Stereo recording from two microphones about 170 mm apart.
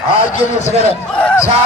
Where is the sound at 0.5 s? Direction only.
40° left (ahead or behind).